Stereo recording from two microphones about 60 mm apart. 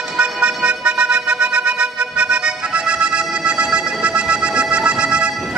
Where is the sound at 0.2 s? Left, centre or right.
Centre.